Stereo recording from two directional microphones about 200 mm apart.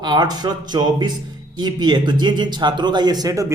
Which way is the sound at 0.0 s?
20° right (ahead or behind).